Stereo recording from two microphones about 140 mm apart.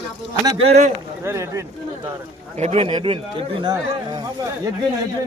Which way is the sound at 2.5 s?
50° right (ahead or behind).